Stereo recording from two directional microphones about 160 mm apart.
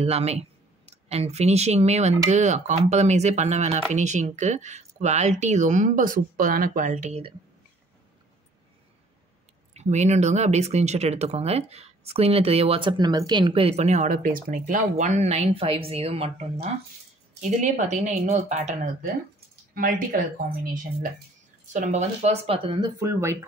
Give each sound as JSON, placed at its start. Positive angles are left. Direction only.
{"t": 0.0, "sound": "speech", "side_deg": -40}
{"t": 9.8, "sound": "speech", "side_deg": -45}
{"t": 19.7, "sound": "speech", "side_deg": -65}
{"t": 22.9, "sound": "speech", "side_deg": -20}